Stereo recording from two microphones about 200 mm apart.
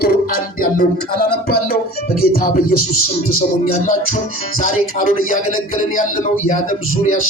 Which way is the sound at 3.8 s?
40° left (ahead or behind).